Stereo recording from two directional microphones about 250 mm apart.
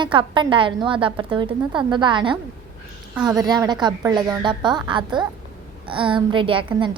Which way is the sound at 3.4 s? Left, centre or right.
Centre.